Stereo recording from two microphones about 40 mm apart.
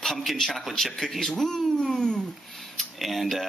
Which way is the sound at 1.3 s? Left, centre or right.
Centre.